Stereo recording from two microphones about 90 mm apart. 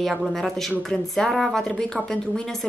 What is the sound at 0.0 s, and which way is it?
Speech, centre (ahead or behind).